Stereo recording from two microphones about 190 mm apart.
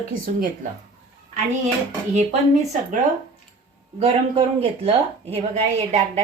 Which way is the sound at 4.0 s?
30° right (ahead or behind).